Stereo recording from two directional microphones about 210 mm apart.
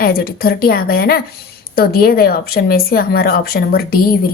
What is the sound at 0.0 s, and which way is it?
A woman's voice, 45° left (ahead or behind).